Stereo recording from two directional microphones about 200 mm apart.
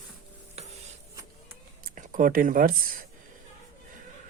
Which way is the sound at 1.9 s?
40° right (ahead or behind).